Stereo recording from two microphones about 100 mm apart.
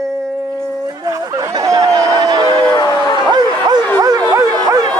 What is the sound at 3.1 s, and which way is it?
Bow-wow, 50° right (ahead or behind).